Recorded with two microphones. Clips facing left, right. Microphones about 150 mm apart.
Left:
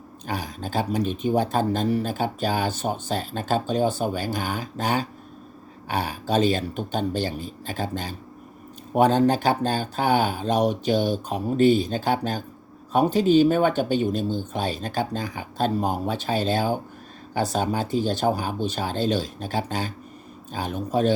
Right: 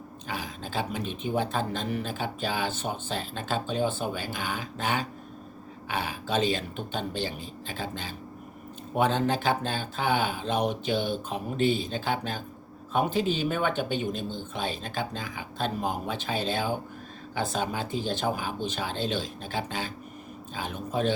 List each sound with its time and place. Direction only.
0.3 s speech: 40° left (ahead or behind)